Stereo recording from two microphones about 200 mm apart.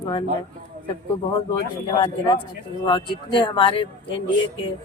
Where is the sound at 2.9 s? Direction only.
25° left (ahead or behind).